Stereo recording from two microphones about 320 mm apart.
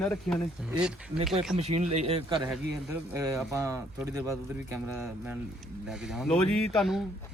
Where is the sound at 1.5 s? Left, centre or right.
Centre.